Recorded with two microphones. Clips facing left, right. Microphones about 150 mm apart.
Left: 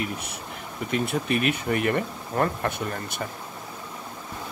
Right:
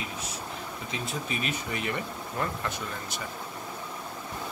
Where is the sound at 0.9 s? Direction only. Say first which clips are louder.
Left 10 dB; 65° left (ahead or behind).